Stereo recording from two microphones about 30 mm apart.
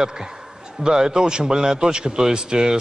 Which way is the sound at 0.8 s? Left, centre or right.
Right.